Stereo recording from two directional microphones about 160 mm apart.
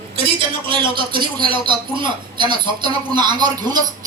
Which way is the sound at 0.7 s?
30° right (ahead or behind).